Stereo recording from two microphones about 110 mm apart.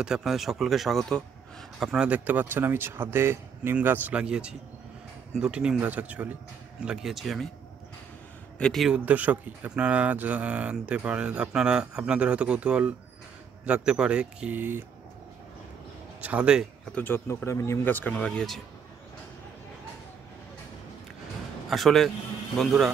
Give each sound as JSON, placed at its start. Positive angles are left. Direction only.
{"t": 0.0, "sound": "speech", "side_deg": -5}
{"t": 1.9, "sound": "speech", "side_deg": -10}
{"t": 8.5, "sound": "speech", "side_deg": 10}
{"t": 8.8, "sound": "speech", "side_deg": -10}
{"t": 16.2, "sound": "speech", "side_deg": -10}
{"t": 16.9, "sound": "speech", "side_deg": 20}
{"t": 21.6, "sound": "a man's voice", "side_deg": 0}